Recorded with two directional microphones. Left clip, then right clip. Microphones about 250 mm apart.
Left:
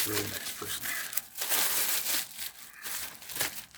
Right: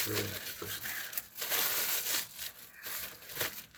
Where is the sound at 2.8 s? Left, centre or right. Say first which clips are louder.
Left 3 dB; left.